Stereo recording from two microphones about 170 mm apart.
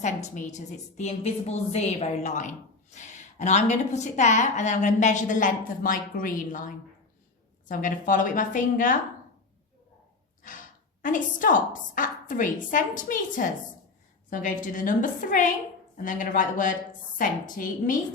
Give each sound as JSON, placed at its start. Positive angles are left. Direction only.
{"t": 0.0, "sound": "a woman's voice", "side_deg": 45}
{"t": 10.4, "sound": "a woman's voice", "side_deg": 50}